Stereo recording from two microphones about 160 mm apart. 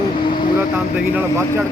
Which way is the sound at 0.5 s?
10° right (ahead or behind).